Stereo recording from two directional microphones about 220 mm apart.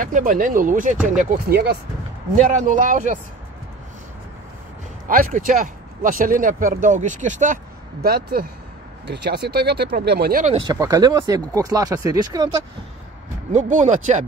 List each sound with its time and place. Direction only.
0.0 s speech: 40° right (ahead or behind)
2.5 s speech: 35° right (ahead or behind)
5.0 s speech: 40° right (ahead or behind)
10.7 s speech: 15° right (ahead or behind)
13.5 s speech: 35° right (ahead or behind)